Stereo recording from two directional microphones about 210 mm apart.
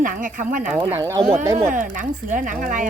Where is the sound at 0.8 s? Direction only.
20° right (ahead or behind).